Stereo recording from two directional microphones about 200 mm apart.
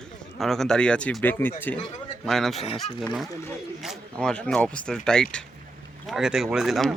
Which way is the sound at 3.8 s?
Centre (ahead or behind).